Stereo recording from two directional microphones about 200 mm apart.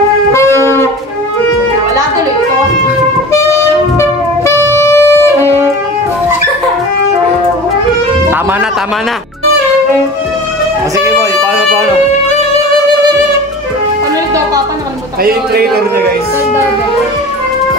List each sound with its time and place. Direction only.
0.3 s music: 15° left (ahead or behind)
4.7 s music: 15° left (ahead or behind)
11.0 s music: 15° right (ahead or behind)
15.2 s speech: 50° right (ahead or behind)